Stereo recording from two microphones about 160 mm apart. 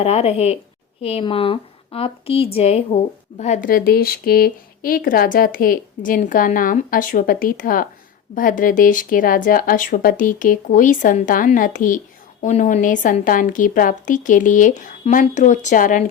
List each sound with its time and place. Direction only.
0.0 s a woman's voice: 40° left (ahead or behind)
3.7 s a woman's voice: 70° left (ahead or behind); by 16.0 s 55° left (ahead or behind)